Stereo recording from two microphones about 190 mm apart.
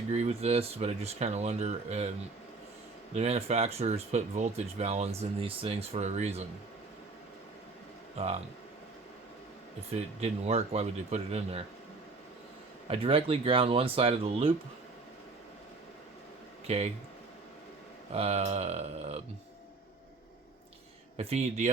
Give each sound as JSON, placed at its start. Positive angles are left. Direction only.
{"t": 0.1, "sound": "speech", "side_deg": -35}
{"t": 9.9, "sound": "speech", "side_deg": -35}
{"t": 12.9, "sound": "speech", "side_deg": -30}
{"t": 16.6, "sound": "speech", "side_deg": -30}
{"t": 18.1, "sound": "speech", "side_deg": -35}
{"t": 21.2, "sound": "speech", "side_deg": -35}